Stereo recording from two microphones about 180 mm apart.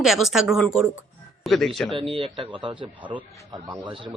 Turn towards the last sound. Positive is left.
turn(degrees=-30)  # may be behind; listen again after turning